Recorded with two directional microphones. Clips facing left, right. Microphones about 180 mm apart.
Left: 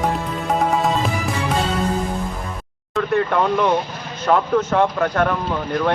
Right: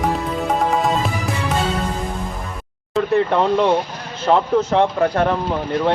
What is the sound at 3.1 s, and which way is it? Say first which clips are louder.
A man's voice: right 2 dB; 25° right (ahead or behind).